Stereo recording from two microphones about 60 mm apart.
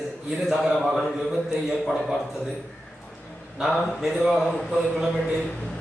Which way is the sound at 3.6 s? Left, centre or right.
Centre.